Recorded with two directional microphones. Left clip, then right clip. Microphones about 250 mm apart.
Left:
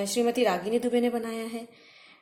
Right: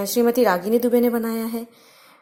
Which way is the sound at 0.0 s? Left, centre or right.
Right.